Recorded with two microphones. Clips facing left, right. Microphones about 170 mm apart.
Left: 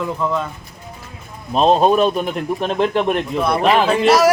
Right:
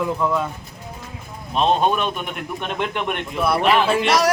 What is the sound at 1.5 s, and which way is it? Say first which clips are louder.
A man's voice: left 5 dB; 35° left (ahead or behind).